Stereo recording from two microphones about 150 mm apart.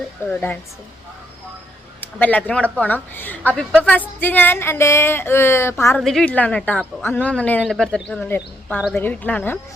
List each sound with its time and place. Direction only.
0.3 s a woman's voice: 10° left (ahead or behind)
2.0 s a woman's voice: 10° left (ahead or behind)
6.0 s a woman's voice: centre (ahead or behind)